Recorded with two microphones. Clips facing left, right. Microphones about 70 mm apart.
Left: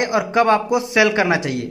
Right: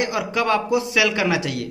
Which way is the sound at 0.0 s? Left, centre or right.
Left.